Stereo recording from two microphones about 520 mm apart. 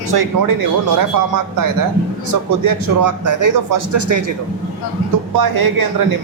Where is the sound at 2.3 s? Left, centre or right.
Right.